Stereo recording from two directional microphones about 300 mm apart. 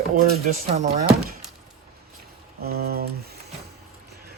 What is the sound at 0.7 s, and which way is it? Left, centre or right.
Speech, right.